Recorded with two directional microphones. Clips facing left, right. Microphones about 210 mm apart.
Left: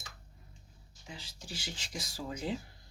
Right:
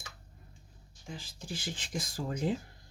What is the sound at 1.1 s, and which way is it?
Speech, 50° right (ahead or behind).